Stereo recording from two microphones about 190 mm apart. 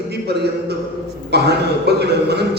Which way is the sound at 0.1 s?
60° right (ahead or behind).